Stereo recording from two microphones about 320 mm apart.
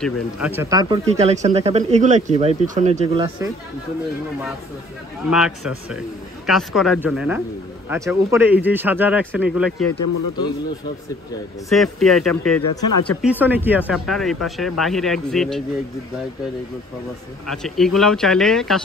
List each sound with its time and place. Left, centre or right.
0.0 s speech: centre
5.3 s speech: centre
9.9 s speech: left
11.7 s speech: centre
12.6 s speech: left
13.2 s speech: centre
17.5 s speech: centre